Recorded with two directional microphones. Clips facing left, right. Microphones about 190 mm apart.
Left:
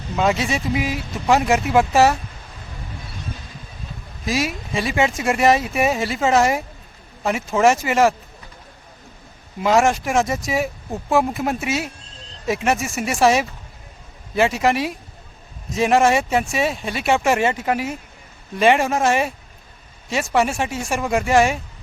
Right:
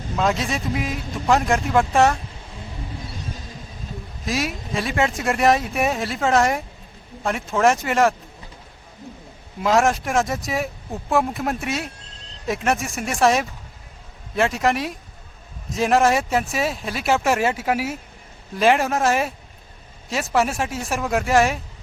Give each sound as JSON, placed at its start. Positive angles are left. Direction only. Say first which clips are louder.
{"t": 0.2, "sound": "speech", "louder": "left 2 dB", "side_deg": 0}
{"t": 4.3, "sound": "speech", "louder": "left 2 dB", "side_deg": 0}
{"t": 9.6, "sound": "speech", "louder": "left 2 dB", "side_deg": 0}